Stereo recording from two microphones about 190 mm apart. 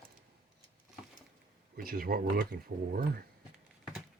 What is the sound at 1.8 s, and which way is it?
Speech, 50° right (ahead or behind).